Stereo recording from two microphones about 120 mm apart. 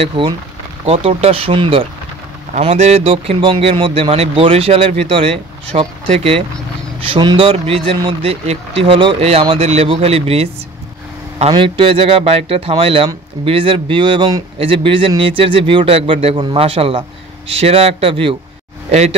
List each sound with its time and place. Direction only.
0.2 s speech: 45° right (ahead or behind)
0.8 s speech: 55° right (ahead or behind)
2.6 s speech: 65° right (ahead or behind)
7.1 s speech: 45° right (ahead or behind)
18.9 s speech: 65° right (ahead or behind)